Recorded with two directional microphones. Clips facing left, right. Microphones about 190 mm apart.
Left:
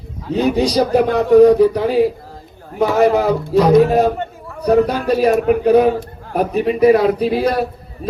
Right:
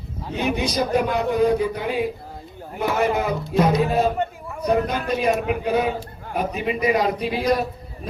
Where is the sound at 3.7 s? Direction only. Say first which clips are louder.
Left 8 dB; 40° left (ahead or behind).